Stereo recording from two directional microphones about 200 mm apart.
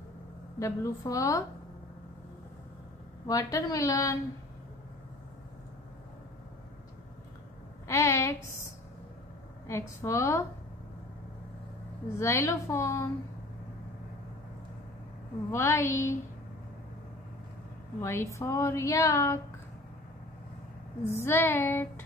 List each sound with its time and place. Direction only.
0.6 s a woman's voice: 15° left (ahead or behind)
3.3 s a woman's voice: 15° left (ahead or behind)
7.9 s a woman's voice: 15° left (ahead or behind)
9.7 s a woman's voice: 15° left (ahead or behind)
12.2 s a woman's voice: 15° left (ahead or behind)
15.5 s a woman's voice: 15° left (ahead or behind)
18.0 s a woman's voice: 15° left (ahead or behind)
21.1 s a woman's voice: 10° left (ahead or behind)